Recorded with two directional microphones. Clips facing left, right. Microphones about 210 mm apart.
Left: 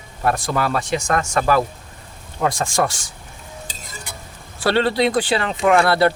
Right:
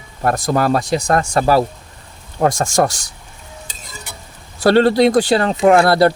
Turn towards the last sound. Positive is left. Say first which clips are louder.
# right 4 dB
turn(degrees=-40)  # may be behind; listen again after turning